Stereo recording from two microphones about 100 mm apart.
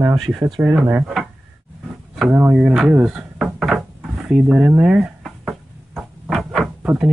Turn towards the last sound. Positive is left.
turn(degrees=-10)  # may be behind; listen again after turning